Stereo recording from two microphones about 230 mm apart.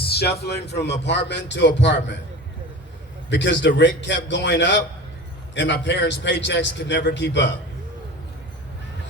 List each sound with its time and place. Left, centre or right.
0.0 s a sound: left
0.4 s a man's voice: left
3.2 s a man's voice: left